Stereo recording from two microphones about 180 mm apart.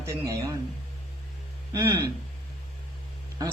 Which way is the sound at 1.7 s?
20° right (ahead or behind).